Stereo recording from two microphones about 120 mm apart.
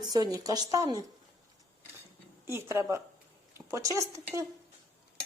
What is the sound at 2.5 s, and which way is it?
Speech, 20° right (ahead or behind).